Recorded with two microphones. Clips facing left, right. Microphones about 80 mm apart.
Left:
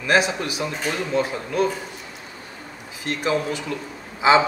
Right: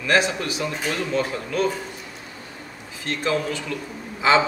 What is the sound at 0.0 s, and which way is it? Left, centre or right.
A man's voice, centre.